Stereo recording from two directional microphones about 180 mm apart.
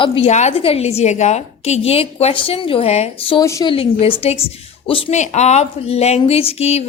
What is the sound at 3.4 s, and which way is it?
Speech, 15° left (ahead or behind).